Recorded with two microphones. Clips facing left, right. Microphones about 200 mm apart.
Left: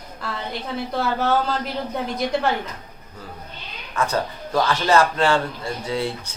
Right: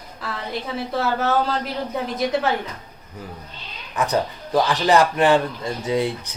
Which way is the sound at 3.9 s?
15° right (ahead or behind).